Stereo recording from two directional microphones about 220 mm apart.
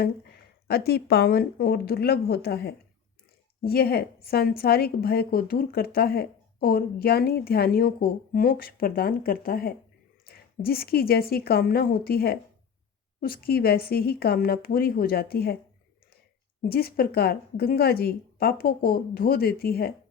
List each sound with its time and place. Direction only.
0.0 s a woman's voice: 45° left (ahead or behind)
16.6 s a woman's voice: 45° left (ahead or behind)